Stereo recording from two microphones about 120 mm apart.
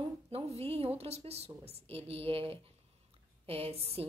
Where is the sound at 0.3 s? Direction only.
55° right (ahead or behind).